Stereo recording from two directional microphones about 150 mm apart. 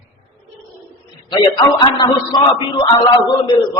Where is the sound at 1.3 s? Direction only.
30° left (ahead or behind).